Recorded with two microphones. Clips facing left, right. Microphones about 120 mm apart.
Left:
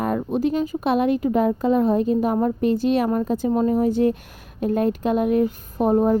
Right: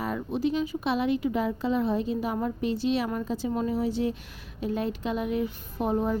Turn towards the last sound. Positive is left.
turn(degrees=45)  # may be behind; listen again after turning